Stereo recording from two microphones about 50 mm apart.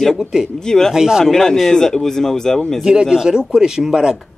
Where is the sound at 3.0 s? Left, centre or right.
Centre.